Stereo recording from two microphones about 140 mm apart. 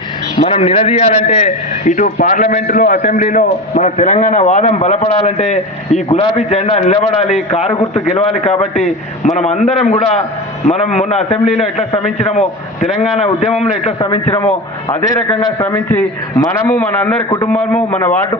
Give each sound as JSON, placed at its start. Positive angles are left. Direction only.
{"t": 0.4, "sound": "a man's voice", "side_deg": 45}
{"t": 14.8, "sound": "a man's voice", "side_deg": 30}
{"t": 15.6, "sound": "a man's voice", "side_deg": 15}